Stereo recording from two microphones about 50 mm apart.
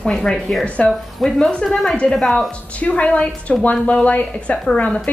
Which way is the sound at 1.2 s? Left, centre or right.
Centre.